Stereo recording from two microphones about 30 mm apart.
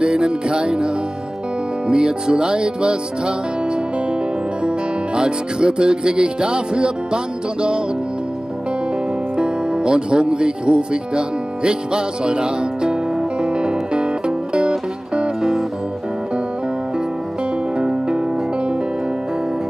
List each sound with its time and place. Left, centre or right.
0.0 s music: right
9.4 s speech: right
13.4 s music: right
17.7 s music: right